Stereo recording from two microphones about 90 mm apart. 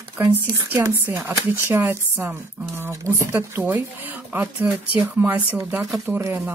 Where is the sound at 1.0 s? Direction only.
20° right (ahead or behind).